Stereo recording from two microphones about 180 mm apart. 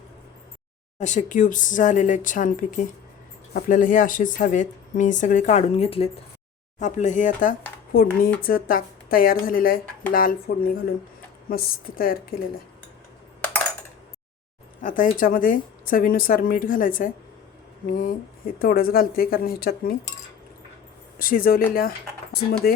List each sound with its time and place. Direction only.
0.9 s speech: 45° left (ahead or behind)
6.7 s speech: 40° left (ahead or behind)
7.9 s speech: 55° left (ahead or behind)
14.8 s speech: 50° left (ahead or behind)
21.2 s speech: 50° left (ahead or behind)
22.6 s speech: 55° left (ahead or behind)